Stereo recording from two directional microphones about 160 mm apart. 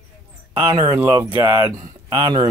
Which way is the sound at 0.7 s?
20° right (ahead or behind).